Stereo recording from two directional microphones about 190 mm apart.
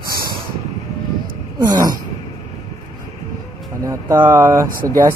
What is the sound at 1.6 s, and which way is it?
Speech, 20° right (ahead or behind).